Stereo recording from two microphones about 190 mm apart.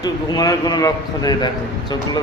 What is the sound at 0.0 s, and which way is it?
A man's voice, 20° left (ahead or behind).